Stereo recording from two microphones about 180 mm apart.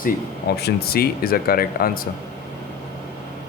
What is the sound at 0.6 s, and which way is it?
A man's voice, 60° left (ahead or behind).